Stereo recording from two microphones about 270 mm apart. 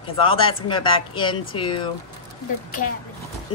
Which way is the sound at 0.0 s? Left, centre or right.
Centre.